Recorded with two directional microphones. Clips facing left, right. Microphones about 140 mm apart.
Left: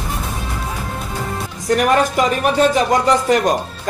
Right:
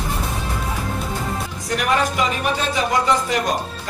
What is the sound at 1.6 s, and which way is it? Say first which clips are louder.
Music: left 6 dB; 45° left (ahead or behind).